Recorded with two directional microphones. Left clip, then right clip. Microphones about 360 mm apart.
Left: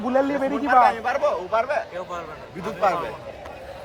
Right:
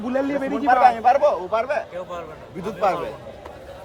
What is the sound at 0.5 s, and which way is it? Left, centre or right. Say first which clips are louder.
A man's voice: right 2 dB; centre.